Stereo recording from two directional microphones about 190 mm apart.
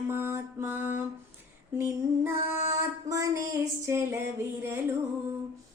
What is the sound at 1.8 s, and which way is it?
Music, 10° right (ahead or behind).